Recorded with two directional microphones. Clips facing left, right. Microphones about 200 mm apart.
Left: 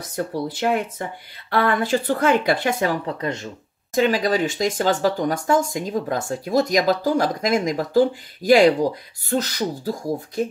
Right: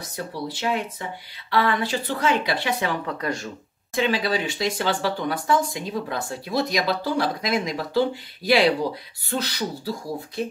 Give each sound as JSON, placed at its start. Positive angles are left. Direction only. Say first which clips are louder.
{"t": 0.1, "sound": "speech", "louder": "left 6 dB", "side_deg": 50}
{"t": 3.1, "sound": "speech", "louder": "left 2 dB", "side_deg": 25}
{"t": 3.9, "sound": "speech", "louder": "left 4 dB", "side_deg": 45}